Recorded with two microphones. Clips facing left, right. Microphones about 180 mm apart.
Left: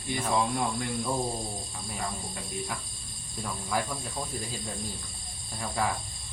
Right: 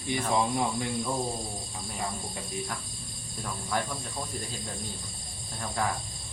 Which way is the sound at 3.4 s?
Centre (ahead or behind).